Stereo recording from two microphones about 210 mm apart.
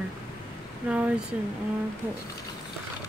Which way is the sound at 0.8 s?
5° right (ahead or behind).